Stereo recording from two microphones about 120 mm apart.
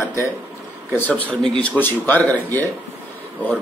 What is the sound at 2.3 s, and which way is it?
Speech, 15° left (ahead or behind).